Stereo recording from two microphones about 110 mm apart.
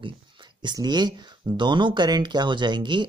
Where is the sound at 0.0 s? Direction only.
45° right (ahead or behind).